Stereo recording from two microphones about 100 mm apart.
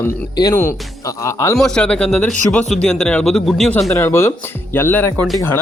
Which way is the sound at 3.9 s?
25° left (ahead or behind).